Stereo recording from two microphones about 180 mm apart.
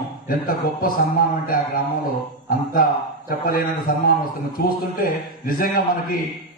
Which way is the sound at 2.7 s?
55° left (ahead or behind).